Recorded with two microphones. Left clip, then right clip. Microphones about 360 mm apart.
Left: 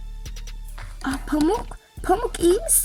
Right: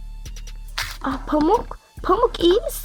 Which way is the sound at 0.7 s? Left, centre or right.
Right.